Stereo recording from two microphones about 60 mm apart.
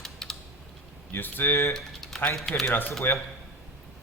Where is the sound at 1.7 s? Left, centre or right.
Centre.